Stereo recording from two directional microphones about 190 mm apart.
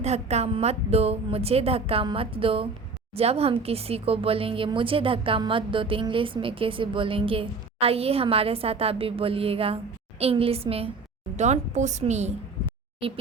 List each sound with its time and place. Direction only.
0.0 s a woman's voice: 35° right (ahead or behind)